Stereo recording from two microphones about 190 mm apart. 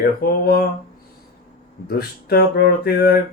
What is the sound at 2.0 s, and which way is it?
Speech, 55° left (ahead or behind).